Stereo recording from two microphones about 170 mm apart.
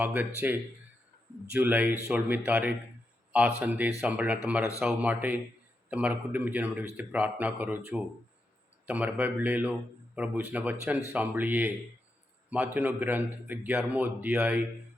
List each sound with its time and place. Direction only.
0.0 s a man's voice: 10° right (ahead or behind)
1.5 s a man's voice: 10° right (ahead or behind)
8.9 s a man's voice: 10° right (ahead or behind)